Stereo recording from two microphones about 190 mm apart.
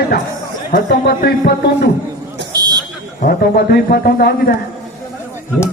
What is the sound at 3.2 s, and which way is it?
A man's voice, 50° left (ahead or behind).